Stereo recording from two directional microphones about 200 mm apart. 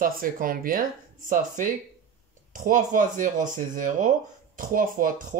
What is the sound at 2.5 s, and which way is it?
Speech, 40° right (ahead or behind).